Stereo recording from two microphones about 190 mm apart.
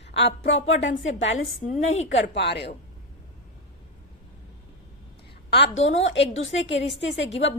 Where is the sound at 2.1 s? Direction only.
65° left (ahead or behind).